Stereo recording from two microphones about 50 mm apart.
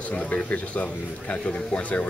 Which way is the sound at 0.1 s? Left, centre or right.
Left.